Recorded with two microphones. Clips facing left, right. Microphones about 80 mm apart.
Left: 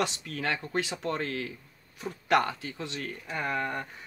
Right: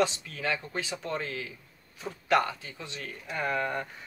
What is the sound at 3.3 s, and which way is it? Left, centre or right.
Speech, centre.